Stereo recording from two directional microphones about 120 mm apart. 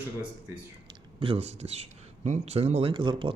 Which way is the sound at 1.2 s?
55° right (ahead or behind).